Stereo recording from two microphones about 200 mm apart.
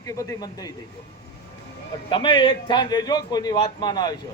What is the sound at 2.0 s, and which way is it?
Speech, 25° left (ahead or behind).